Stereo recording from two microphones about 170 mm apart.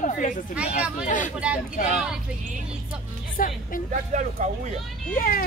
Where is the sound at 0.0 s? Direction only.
50° left (ahead or behind).